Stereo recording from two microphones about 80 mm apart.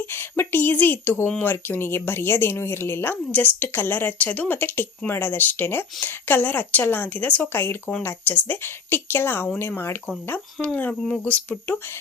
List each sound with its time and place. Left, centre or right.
0.0 s speech: left